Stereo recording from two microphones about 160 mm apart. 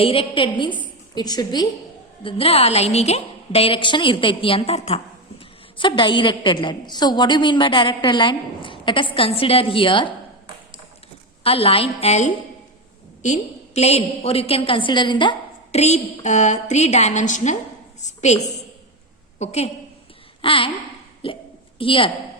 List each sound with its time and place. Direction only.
0.0 s a woman's voice: 35° left (ahead or behind)
2.2 s a woman's voice: 40° left (ahead or behind)
11.4 s a woman's voice: 35° left (ahead or behind)
15.8 s a woman's voice: 45° left (ahead or behind)
19.4 s a woman's voice: 40° left (ahead or behind)
20.4 s a sound: 35° left (ahead or behind)
21.2 s a woman's voice: 35° left (ahead or behind)